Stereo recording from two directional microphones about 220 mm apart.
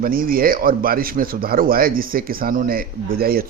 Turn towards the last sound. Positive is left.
turn(degrees=-45)  # may be behind; listen again after turning